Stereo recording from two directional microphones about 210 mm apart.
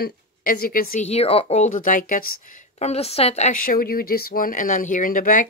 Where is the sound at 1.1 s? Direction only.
30° left (ahead or behind).